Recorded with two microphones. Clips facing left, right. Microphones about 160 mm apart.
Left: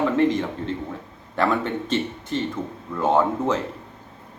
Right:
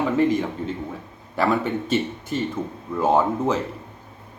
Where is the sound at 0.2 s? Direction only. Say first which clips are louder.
Even; 5° right (ahead or behind).